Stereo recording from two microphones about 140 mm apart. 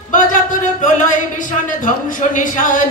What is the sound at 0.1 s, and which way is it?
Speech, 65° left (ahead or behind).